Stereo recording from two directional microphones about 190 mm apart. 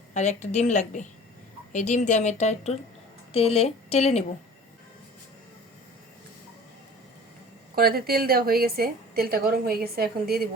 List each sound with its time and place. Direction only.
0.1 s speech: 35° left (ahead or behind)
7.8 s a woman's voice: 55° right (ahead or behind)